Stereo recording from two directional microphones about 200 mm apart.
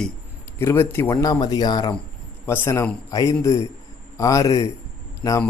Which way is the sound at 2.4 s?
10° left (ahead or behind).